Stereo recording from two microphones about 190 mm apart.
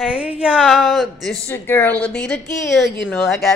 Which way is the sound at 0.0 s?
5° right (ahead or behind).